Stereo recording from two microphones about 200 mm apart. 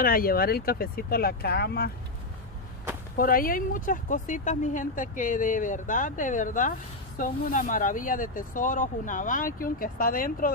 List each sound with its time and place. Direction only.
0.0 s speech: 45° left (ahead or behind)
3.2 s speech: 45° left (ahead or behind)